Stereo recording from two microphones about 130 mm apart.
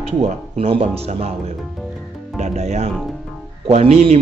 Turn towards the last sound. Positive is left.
turn(degrees=-50)  # may be behind; listen again after turning